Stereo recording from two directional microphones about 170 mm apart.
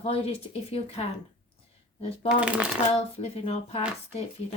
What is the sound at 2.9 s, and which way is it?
Speech, 35° left (ahead or behind).